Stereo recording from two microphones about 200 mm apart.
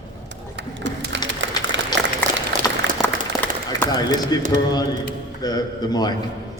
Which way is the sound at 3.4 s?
10° left (ahead or behind).